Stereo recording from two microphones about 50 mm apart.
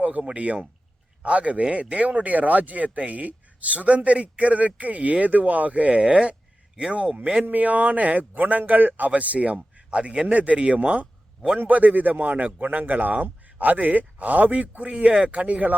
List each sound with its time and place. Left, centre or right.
0.0 s a man's voice: right
11.6 s a man's voice: right